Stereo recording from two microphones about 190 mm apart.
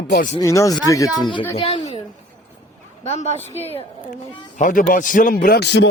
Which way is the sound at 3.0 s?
35° left (ahead or behind).